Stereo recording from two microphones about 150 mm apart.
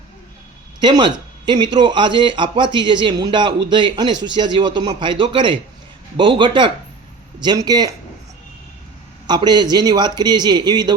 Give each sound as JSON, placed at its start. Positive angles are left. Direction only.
{"t": 0.8, "sound": "a man's voice", "side_deg": -30}
{"t": 9.2, "sound": "a man's voice", "side_deg": -30}